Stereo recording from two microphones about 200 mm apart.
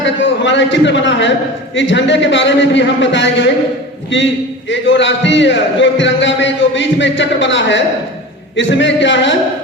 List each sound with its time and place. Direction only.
0.0 s a man's voice: 65° left (ahead or behind)
4.1 s music: 65° left (ahead or behind)
4.7 s a man's voice: 65° left (ahead or behind)
8.5 s music: 65° left (ahead or behind)